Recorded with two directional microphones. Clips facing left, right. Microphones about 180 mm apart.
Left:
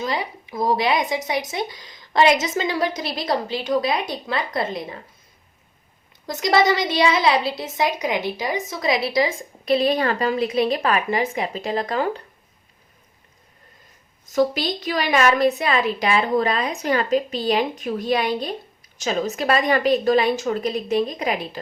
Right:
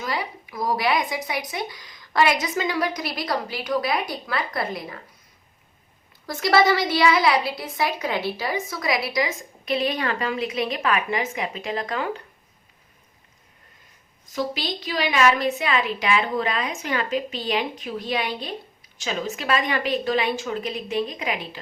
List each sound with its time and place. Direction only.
0.0 s a child's voice: 25° left (ahead or behind)
6.2 s a child's voice: 20° left (ahead or behind); by 12.2 s 35° left (ahead or behind)
14.3 s a woman's voice: 45° left (ahead or behind)